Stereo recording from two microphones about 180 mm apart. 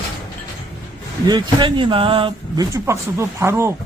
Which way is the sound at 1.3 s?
25° right (ahead or behind).